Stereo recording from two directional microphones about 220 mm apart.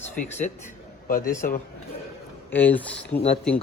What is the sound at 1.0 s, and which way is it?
Speech, 40° left (ahead or behind).